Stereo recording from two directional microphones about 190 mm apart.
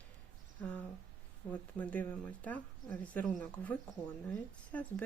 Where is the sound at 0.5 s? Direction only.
10° left (ahead or behind).